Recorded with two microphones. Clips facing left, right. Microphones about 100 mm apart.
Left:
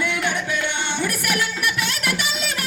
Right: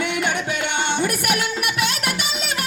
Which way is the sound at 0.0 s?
65° right (ahead or behind).